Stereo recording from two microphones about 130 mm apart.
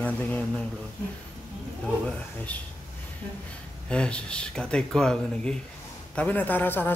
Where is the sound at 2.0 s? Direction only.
10° left (ahead or behind).